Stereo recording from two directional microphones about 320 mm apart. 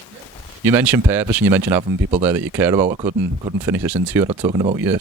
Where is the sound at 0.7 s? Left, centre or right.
Centre.